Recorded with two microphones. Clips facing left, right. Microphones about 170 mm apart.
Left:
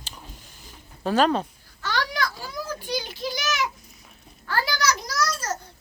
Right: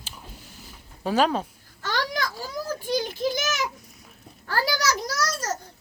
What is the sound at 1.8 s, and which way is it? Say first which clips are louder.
A child's voice: left 1 dB; 45° right (ahead or behind).